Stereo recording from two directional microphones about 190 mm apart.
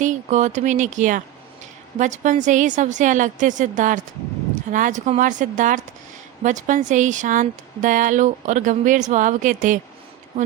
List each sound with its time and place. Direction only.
0.0 s speech: 40° right (ahead or behind)